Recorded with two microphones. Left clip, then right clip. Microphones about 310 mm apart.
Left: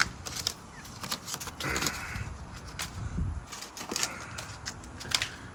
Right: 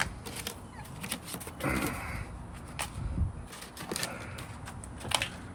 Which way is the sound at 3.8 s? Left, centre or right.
Left.